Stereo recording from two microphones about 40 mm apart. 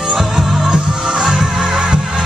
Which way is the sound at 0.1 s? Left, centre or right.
Centre.